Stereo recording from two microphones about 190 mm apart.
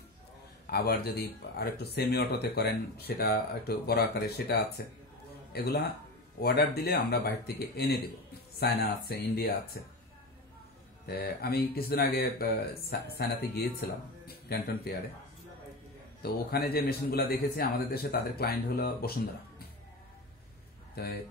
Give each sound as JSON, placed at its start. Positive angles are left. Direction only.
{"t": 0.7, "sound": "speech", "side_deg": 55}
{"t": 11.1, "sound": "speech", "side_deg": 55}
{"t": 16.2, "sound": "a man's voice", "side_deg": 55}
{"t": 20.9, "sound": "speech", "side_deg": 55}